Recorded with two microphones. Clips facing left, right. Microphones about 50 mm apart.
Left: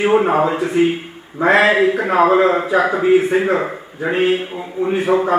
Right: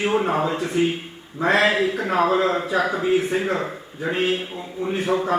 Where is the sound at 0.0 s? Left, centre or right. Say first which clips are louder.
Left 7 dB; centre.